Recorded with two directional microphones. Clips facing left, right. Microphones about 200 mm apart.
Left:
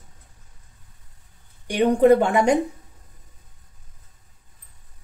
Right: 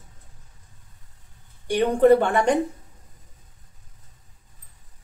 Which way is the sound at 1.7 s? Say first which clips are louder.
Left 1 dB; 15° left (ahead or behind).